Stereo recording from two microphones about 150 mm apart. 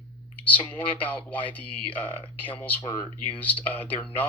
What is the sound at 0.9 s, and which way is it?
Speech, 10° left (ahead or behind).